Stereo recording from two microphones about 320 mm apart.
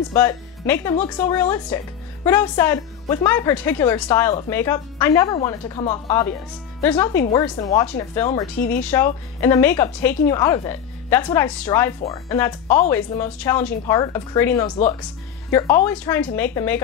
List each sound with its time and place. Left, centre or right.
0.1 s a woman's voice: centre
8.5 s speech: left
8.8 s a woman's voice: centre